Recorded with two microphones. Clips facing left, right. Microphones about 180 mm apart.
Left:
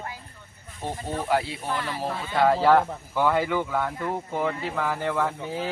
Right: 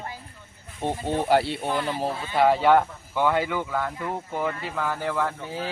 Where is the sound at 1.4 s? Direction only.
65° right (ahead or behind).